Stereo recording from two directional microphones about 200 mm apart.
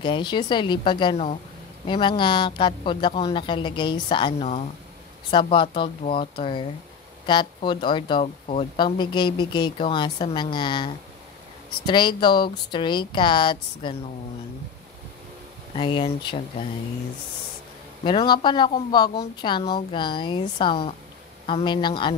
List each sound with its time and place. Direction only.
0.0 s speech: 25° left (ahead or behind)
15.7 s speech: 25° left (ahead or behind)
18.0 s speech: 20° left (ahead or behind)